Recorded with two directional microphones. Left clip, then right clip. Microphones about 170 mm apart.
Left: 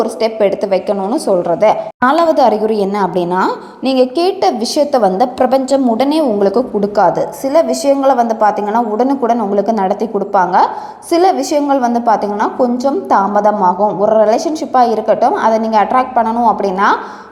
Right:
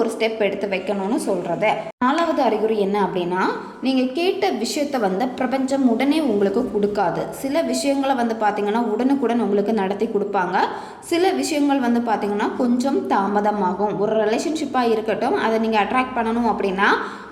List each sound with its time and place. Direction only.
0.0 s a woman's voice: 40° left (ahead or behind)